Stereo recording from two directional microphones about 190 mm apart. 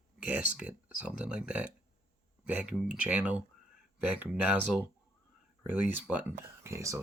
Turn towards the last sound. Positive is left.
turn(degrees=-15)  # may be behind; listen again after turning